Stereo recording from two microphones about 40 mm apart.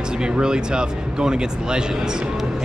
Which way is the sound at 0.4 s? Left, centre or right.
Centre.